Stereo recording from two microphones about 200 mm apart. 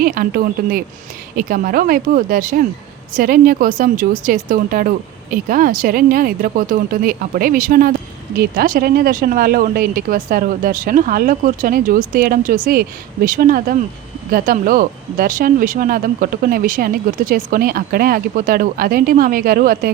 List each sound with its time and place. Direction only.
0.0 s speech: 45° right (ahead or behind)